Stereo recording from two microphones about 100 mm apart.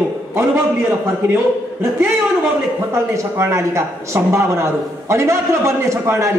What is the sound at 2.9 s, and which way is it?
Speech, 25° right (ahead or behind).